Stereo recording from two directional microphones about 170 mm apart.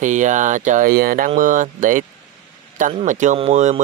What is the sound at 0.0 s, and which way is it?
Speech, 45° right (ahead or behind).